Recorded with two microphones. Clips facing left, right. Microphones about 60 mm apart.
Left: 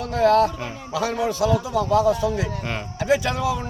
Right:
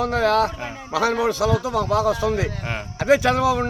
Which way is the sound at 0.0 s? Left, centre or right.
Right.